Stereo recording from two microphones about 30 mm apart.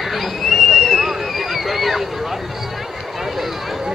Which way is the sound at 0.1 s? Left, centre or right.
Centre.